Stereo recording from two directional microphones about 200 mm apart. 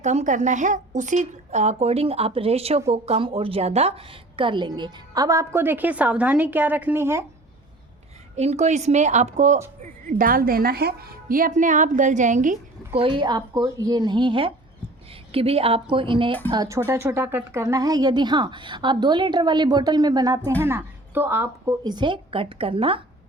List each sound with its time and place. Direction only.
0.0 s a woman's voice: 35° right (ahead or behind); by 7.3 s 10° right (ahead or behind)
8.4 s a woman's voice: 35° right (ahead or behind)
13.0 s speech: 25° right (ahead or behind)